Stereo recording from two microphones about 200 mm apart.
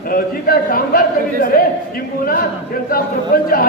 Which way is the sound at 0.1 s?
50° left (ahead or behind).